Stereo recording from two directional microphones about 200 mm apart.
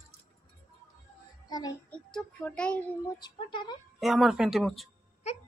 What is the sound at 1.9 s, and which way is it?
Speech, 5° left (ahead or behind).